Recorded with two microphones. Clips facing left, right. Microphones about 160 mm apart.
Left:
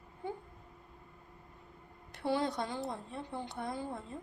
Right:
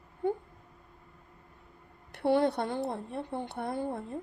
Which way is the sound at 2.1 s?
60° right (ahead or behind).